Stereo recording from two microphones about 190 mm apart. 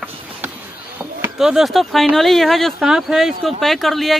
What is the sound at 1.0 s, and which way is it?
Speech, 5° right (ahead or behind).